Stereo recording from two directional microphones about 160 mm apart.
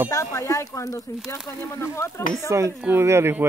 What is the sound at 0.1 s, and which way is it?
Speech, 20° left (ahead or behind).